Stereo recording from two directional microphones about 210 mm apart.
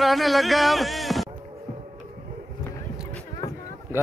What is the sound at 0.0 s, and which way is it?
Speech, centre (ahead or behind).